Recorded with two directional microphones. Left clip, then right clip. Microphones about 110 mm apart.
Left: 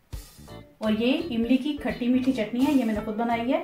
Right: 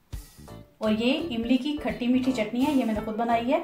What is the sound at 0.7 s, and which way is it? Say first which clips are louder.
Speech: even; centre (ahead or behind).